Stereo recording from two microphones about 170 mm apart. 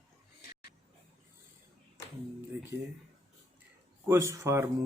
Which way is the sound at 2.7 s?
20° right (ahead or behind).